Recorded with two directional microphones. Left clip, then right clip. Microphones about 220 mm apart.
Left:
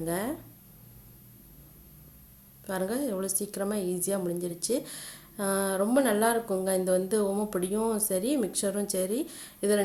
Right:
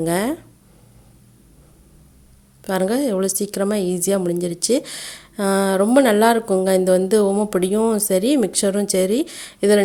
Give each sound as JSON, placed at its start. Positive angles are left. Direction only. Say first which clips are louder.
{"t": 0.0, "sound": "a woman's voice", "louder": "right 11 dB", "side_deg": -40}
{"t": 2.6, "sound": "a woman's voice", "louder": "right 11 dB", "side_deg": -35}